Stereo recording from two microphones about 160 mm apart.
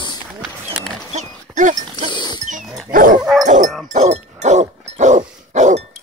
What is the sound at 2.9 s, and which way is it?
Dog, 60° right (ahead or behind).